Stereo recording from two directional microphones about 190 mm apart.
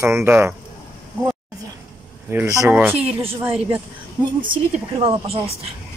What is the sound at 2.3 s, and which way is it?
Speech, 15° right (ahead or behind).